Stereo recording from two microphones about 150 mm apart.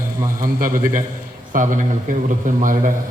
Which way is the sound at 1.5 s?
60° right (ahead or behind).